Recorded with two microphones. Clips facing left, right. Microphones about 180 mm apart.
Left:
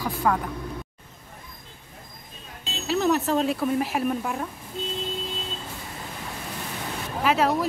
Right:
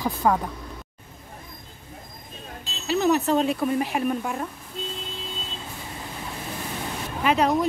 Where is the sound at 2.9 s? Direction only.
Centre (ahead or behind).